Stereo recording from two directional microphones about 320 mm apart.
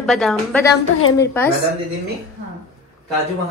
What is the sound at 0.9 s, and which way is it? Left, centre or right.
Speech, left.